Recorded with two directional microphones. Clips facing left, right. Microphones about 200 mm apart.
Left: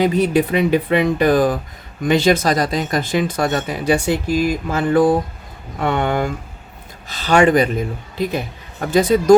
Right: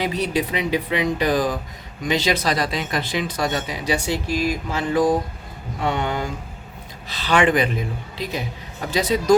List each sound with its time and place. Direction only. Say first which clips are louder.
0.0 s speech: left 7 dB; 50° left (ahead or behind)
7.1 s speech: left 5 dB; 45° left (ahead or behind)